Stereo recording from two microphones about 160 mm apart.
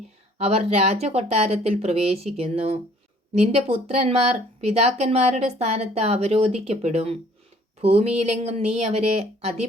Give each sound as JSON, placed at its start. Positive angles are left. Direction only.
{"t": 0.3, "sound": "speech", "side_deg": -40}